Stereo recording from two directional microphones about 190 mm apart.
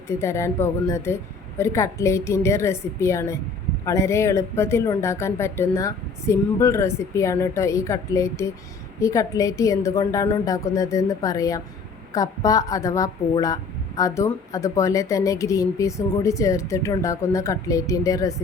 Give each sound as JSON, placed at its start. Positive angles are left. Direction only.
{"t": 0.2, "sound": "speech", "side_deg": 15}